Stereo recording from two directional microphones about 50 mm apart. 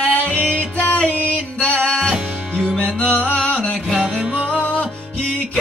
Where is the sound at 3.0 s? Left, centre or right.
Left.